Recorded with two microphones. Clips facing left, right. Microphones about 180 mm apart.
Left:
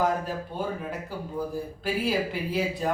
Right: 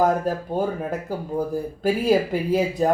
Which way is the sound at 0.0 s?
45° right (ahead or behind).